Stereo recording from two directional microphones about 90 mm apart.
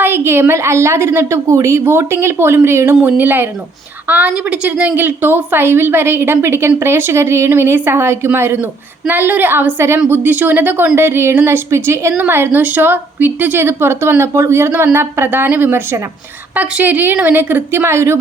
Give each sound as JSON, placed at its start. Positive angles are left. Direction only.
{"t": 0.0, "sound": "a woman's voice", "side_deg": -25}